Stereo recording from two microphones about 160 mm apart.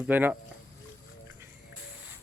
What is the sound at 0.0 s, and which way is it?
Speech, 10° right (ahead or behind).